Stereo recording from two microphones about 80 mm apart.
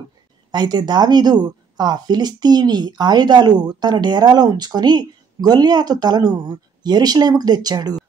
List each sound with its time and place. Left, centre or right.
0.5 s speech: right